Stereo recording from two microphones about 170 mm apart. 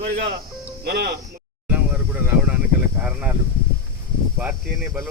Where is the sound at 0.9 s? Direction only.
65° right (ahead or behind).